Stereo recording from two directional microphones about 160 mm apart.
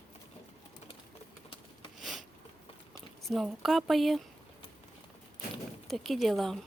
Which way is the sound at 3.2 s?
Centre (ahead or behind).